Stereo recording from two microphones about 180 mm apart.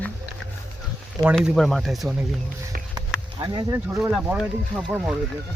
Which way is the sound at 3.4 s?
25° right (ahead or behind).